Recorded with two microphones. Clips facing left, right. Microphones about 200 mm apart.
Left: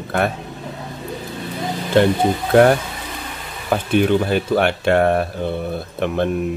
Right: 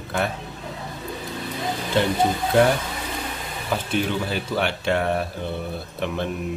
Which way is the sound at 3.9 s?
55° left (ahead or behind).